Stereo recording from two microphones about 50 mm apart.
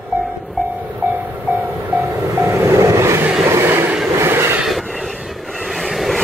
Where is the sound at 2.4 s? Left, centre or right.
Right.